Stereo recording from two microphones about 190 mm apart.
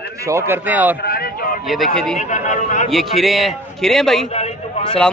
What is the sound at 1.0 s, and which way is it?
Speech, 55° left (ahead or behind).